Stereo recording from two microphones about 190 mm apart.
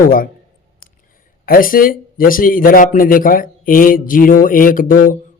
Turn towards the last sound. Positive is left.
turn(degrees=45)  # may be behind; listen again after turning